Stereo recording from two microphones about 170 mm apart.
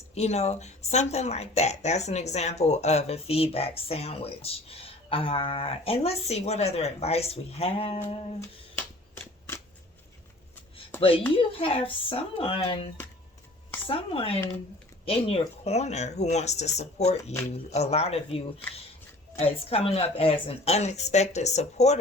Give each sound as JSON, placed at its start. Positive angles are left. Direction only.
{"t": 0.1, "sound": "a woman's voice", "side_deg": 40}
{"t": 11.3, "sound": "a woman's voice", "side_deg": 35}